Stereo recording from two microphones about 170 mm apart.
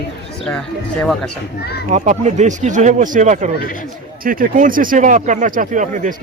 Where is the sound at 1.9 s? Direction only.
45° right (ahead or behind).